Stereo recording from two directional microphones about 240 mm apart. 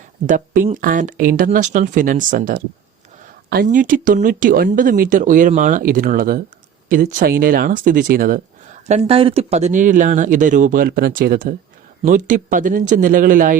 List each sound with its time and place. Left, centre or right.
0.3 s speech: right
8.9 s speech: right